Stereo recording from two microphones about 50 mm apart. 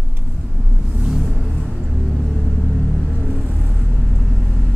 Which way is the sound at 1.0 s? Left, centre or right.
Centre.